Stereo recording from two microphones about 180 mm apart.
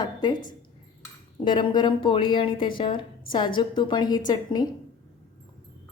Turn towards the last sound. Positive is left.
turn(degrees=20)  # may be behind; listen again after turning